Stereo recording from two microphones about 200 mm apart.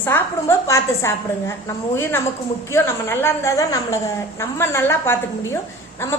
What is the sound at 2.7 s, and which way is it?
A woman's voice, 15° left (ahead or behind).